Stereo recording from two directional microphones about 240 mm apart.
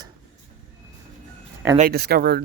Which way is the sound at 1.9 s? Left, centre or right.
Right.